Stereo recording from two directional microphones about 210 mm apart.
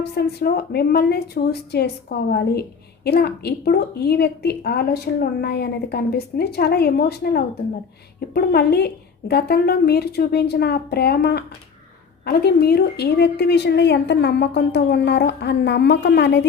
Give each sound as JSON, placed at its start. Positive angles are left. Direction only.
{"t": 0.0, "sound": "a woman's voice", "side_deg": 50}